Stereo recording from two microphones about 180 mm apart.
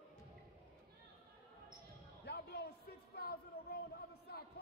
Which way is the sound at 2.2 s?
60° left (ahead or behind).